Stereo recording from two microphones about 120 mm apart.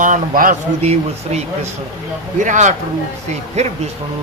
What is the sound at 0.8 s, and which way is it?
Speech, 60° right (ahead or behind).